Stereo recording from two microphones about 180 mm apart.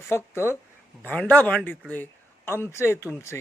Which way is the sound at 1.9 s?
10° left (ahead or behind).